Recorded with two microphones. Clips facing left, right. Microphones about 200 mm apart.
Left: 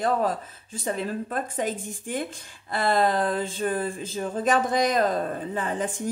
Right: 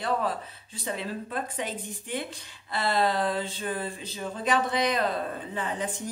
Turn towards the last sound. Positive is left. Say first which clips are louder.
# left 4 dB
turn(degrees=45)  # may be behind; listen again after turning